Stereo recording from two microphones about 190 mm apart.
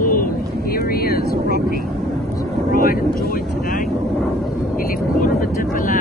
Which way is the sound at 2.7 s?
50° left (ahead or behind).